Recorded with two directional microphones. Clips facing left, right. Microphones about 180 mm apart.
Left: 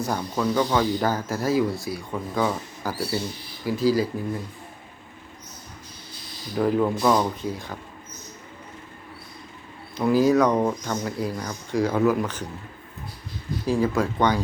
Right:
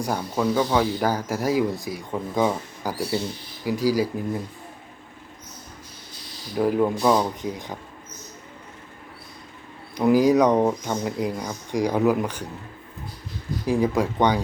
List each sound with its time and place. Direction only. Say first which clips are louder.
0.0 s speech: right 1 dB; 10° right (ahead or behind)
6.6 s speech: right 1 dB; 10° right (ahead or behind)
9.9 s speech: right 2 dB; 15° right (ahead or behind)
13.7 s speech: right 1 dB; 15° right (ahead or behind)